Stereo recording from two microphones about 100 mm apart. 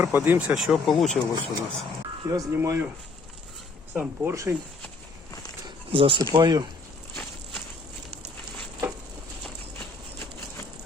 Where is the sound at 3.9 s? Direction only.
15° right (ahead or behind).